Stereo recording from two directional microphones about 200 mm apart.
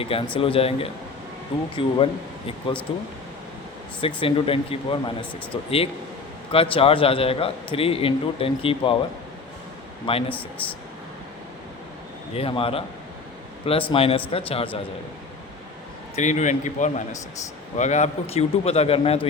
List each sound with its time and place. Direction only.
0.0 s a man's voice: 30° left (ahead or behind)
10.1 s a man's voice: 30° left (ahead or behind)
12.3 s a man's voice: 30° left (ahead or behind)
13.9 s a man's voice: 30° left (ahead or behind)
16.1 s a man's voice: 35° left (ahead or behind)